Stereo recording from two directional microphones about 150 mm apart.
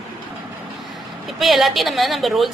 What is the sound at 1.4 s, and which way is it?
A woman's voice, centre (ahead or behind).